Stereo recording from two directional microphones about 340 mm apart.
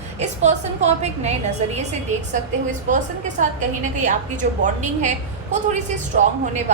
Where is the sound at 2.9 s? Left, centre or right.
Right.